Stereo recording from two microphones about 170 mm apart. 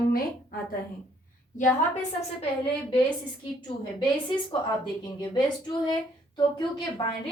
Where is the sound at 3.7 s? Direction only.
30° left (ahead or behind).